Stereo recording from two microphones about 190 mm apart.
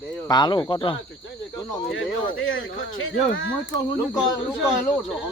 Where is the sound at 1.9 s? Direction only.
90° left.